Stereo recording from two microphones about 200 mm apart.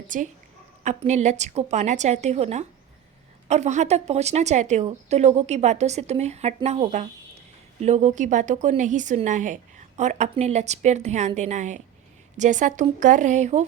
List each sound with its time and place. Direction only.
0.1 s speech: 40° right (ahead or behind)